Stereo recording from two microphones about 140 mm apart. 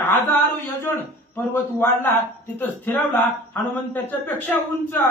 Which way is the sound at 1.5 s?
15° left (ahead or behind).